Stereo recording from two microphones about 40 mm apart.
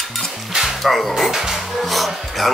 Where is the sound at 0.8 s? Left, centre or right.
Centre.